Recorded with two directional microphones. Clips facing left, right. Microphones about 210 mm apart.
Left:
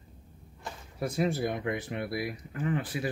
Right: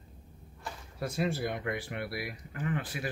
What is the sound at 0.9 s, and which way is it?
Speech, 20° left (ahead or behind).